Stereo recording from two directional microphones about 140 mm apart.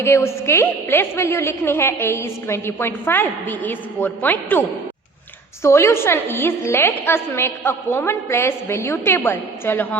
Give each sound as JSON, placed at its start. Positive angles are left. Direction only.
{"t": 0.0, "sound": "a woman's voice", "side_deg": 20}
{"t": 5.6, "sound": "a woman's voice", "side_deg": 15}